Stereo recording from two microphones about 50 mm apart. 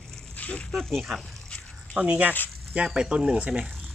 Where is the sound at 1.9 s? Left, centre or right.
Right.